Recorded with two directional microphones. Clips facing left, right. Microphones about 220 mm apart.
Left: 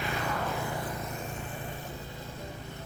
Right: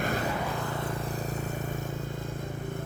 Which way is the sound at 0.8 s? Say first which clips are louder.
Right 3 dB; 30° right (ahead or behind).